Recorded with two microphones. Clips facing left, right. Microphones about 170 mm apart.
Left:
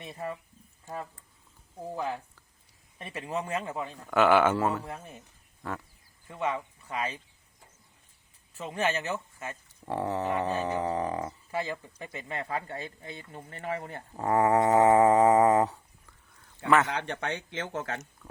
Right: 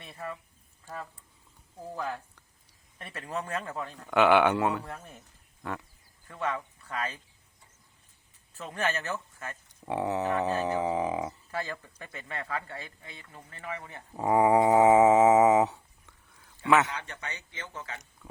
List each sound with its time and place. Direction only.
1.8 s speech: 15° left (ahead or behind)
3.9 s a man's voice: centre (ahead or behind)
4.9 s speech: 15° left (ahead or behind)
5.6 s a man's voice: centre (ahead or behind)
6.2 s speech: 15° left (ahead or behind)
8.5 s speech: 15° left (ahead or behind)
9.8 s a man's voice: centre (ahead or behind)
11.5 s speech: 15° left (ahead or behind); by 13.7 s 30° left (ahead or behind)
13.7 s speech: 40° left (ahead or behind)
14.1 s a sound: 10° right (ahead or behind)
16.6 s a man's voice: centre (ahead or behind)
16.9 s speech: 65° left (ahead or behind)